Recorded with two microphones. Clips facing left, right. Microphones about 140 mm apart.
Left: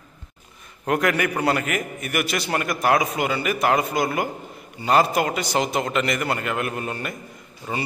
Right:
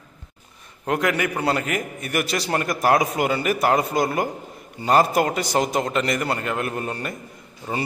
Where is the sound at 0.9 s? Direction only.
20° right (ahead or behind).